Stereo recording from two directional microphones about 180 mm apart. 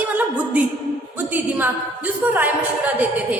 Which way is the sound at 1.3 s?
10° right (ahead or behind).